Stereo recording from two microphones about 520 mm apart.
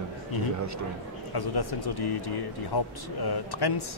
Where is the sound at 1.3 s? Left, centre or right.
Left.